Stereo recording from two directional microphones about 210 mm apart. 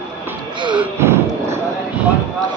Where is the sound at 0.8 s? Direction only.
10° right (ahead or behind).